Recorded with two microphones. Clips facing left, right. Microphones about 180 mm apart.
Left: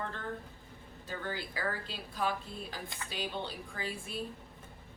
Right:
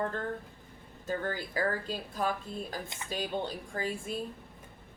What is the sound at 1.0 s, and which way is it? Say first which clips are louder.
A woman's voice: right 6 dB; 45° right (ahead or behind).